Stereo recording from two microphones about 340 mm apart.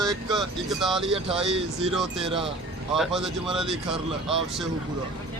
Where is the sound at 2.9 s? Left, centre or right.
Centre.